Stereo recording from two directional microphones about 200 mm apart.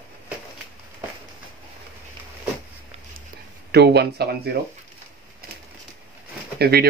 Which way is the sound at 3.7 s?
55° right (ahead or behind).